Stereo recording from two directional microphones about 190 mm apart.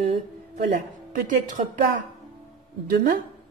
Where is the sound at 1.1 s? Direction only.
45° right (ahead or behind).